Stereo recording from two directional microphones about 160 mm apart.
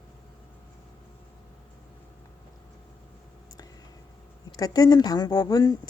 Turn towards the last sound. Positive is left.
turn(degrees=25)  # may be behind; listen again after turning